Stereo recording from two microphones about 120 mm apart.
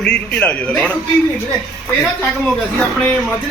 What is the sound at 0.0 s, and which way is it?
Speech, 10° left (ahead or behind).